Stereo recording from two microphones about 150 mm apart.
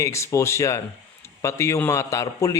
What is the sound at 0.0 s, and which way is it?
A man's voice, 20° left (ahead or behind).